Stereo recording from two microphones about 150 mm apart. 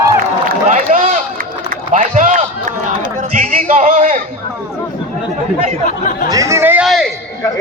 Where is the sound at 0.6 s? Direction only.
60° right (ahead or behind).